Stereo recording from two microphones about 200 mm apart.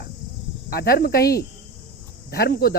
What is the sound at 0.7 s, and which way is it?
Speech, 50° left (ahead or behind).